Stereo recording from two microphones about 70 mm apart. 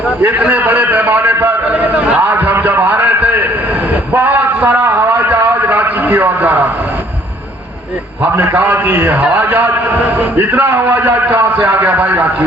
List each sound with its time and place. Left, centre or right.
0.2 s a man's voice: right
0.7 s a sound: right
8.5 s a man's voice: right